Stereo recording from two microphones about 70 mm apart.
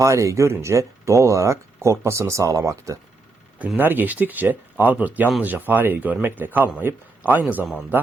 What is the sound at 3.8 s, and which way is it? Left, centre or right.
Speech, right.